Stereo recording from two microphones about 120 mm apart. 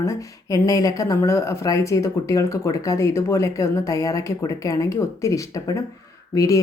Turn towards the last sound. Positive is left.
turn(degrees=30)  # may be behind; listen again after turning